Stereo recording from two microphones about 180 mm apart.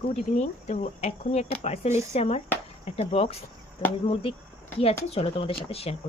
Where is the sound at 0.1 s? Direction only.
40° left (ahead or behind).